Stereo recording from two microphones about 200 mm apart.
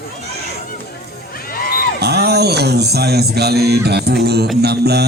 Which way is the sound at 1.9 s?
55° right (ahead or behind).